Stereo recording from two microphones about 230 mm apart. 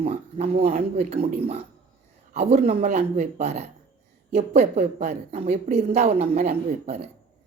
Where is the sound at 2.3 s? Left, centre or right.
Right.